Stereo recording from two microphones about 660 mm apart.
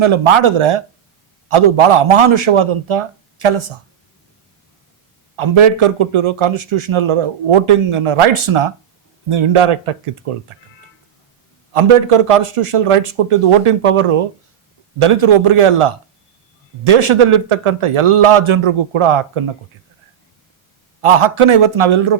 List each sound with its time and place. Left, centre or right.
0.0 s speech: right
5.4 s speech: right
11.7 s speech: right
21.0 s speech: right